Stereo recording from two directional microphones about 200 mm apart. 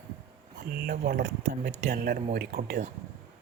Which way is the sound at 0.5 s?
50° right (ahead or behind).